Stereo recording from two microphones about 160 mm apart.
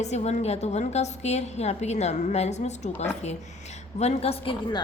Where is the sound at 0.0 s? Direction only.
45° left (ahead or behind).